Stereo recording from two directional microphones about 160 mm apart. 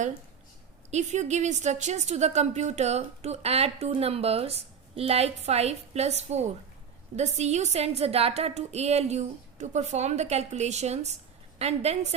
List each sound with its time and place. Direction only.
0.9 s a woman's voice: 45° right (ahead or behind)